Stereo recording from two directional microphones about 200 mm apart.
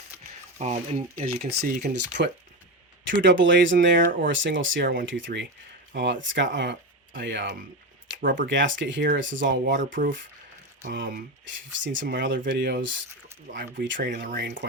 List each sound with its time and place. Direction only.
0.6 s speech: 35° right (ahead or behind); by 1.9 s 50° right (ahead or behind)
2.0 s speech: 60° right (ahead or behind)
8.2 s speech: 45° right (ahead or behind)
8.4 s speech: 65° right (ahead or behind)
9.8 s speech: 40° right (ahead or behind)
11.8 s speech: 70° right (ahead or behind)
12.5 s speech: 55° right (ahead or behind)
13.5 s speech: 40° right (ahead or behind)
13.8 s speech: 65° right (ahead or behind)
14.1 s speech: 45° right (ahead or behind)